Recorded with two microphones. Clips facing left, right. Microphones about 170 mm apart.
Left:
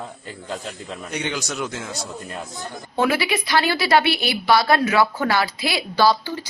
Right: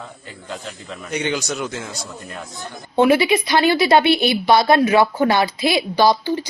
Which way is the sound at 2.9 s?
20° right (ahead or behind).